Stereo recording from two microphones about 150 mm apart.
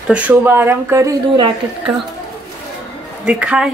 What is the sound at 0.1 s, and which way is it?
Speech, 10° right (ahead or behind).